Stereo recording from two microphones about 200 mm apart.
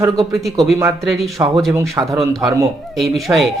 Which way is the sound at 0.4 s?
Centre (ahead or behind).